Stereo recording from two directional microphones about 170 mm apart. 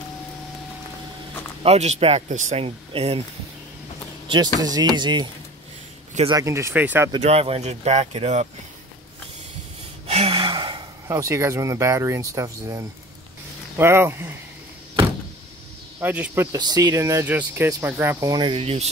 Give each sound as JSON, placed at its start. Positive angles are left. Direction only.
{"t": 1.6, "sound": "speech", "side_deg": -40}
{"t": 4.6, "sound": "speech", "side_deg": -25}
{"t": 6.3, "sound": "speech", "side_deg": -15}
{"t": 7.2, "sound": "speech", "side_deg": -35}
{"t": 10.0, "sound": "gasp", "side_deg": -35}
{"t": 11.1, "sound": "speech", "side_deg": -15}
{"t": 16.0, "sound": "speech", "side_deg": -10}
{"t": 16.5, "sound": "speech", "side_deg": -25}